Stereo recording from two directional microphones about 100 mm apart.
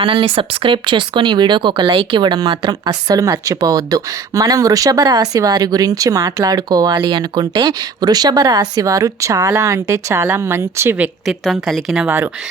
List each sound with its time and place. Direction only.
0.0 s speech: 65° right (ahead or behind); by 11.1 s 20° right (ahead or behind)
11.3 s a woman's voice: 5° right (ahead or behind)
12.0 s speech: 20° right (ahead or behind)